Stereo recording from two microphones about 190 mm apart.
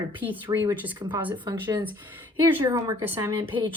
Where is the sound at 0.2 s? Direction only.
10° right (ahead or behind).